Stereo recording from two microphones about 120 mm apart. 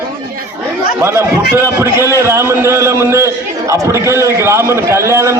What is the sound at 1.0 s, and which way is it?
A man's voice, 20° right (ahead or behind).